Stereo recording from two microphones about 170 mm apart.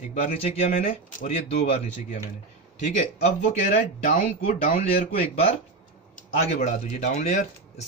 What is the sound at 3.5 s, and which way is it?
Speech, 45° left (ahead or behind).